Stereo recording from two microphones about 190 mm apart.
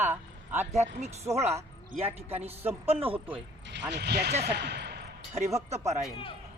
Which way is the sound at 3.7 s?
65° right (ahead or behind).